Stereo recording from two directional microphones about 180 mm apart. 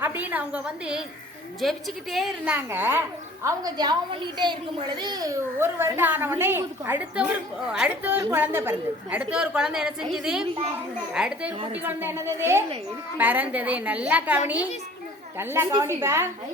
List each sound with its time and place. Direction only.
0.0 s a woman's voice: 10° right (ahead or behind)